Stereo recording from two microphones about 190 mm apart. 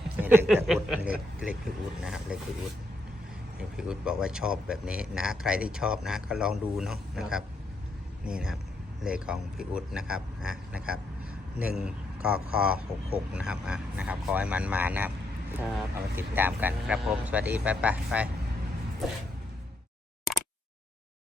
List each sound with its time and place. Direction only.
0.2 s a sound: 10° right (ahead or behind)
0.7 s speech: 5° right (ahead or behind)
3.6 s speech: 5° right (ahead or behind)